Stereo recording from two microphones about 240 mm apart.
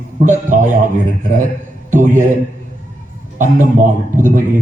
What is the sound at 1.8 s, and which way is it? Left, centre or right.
Speech, right.